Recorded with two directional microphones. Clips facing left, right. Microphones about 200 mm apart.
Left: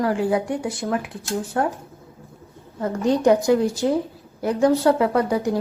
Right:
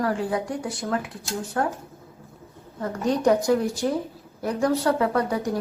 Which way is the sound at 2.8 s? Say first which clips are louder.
Left 4 dB; 25° left (ahead or behind).